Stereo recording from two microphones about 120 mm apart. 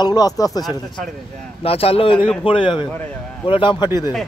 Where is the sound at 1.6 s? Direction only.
55° left (ahead or behind).